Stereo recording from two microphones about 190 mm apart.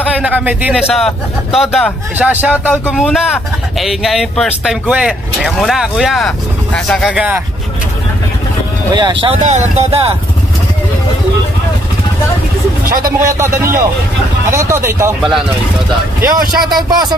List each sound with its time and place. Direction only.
0.2 s speech: 10° right (ahead or behind)
7.1 s speech: 5° right (ahead or behind)
8.9 s speech: 25° right (ahead or behind)
9.4 s speech: 40° right (ahead or behind)
12.8 s speech: 50° right (ahead or behind)
13.4 s speech: 15° right (ahead or behind)
16.7 s speech: 20° right (ahead or behind)